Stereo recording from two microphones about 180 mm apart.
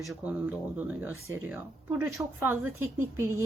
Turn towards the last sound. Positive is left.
turn(degrees=-15)  # may be behind; listen again after turning